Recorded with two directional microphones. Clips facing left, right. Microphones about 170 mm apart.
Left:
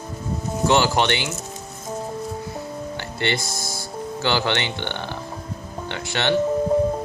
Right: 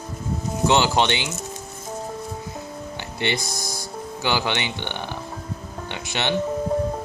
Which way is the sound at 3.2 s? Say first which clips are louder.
Even; 15° right (ahead or behind).